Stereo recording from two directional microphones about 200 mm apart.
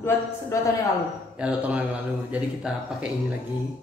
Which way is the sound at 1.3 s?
5° right (ahead or behind).